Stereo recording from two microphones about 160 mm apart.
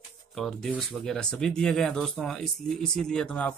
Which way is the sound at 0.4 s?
5° left (ahead or behind).